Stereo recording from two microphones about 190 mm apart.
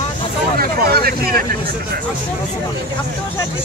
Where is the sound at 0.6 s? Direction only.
55° right (ahead or behind).